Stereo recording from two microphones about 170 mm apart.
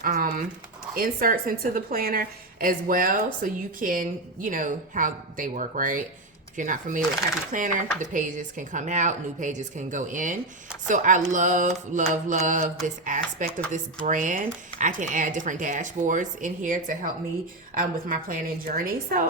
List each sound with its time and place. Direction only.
0.0 s a woman's voice: 50° right (ahead or behind)